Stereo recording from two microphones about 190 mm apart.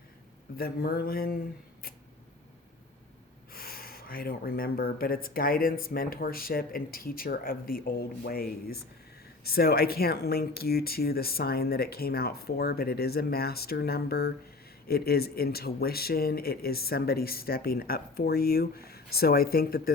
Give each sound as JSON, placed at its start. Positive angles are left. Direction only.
{"t": 0.5, "sound": "speech", "side_deg": 55}
{"t": 3.5, "sound": "speech", "side_deg": 50}